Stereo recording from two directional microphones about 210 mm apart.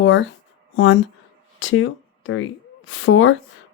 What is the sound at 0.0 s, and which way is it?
Speech, 65° left (ahead or behind).